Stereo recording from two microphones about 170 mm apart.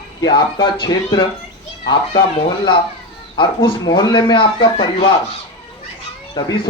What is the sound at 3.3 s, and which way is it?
A man's voice, 30° left (ahead or behind).